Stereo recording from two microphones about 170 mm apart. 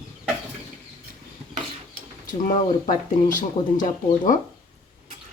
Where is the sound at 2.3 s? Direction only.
50° left (ahead or behind).